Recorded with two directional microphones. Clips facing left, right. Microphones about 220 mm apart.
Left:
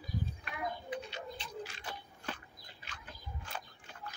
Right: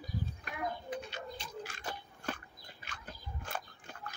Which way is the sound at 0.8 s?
45° right (ahead or behind).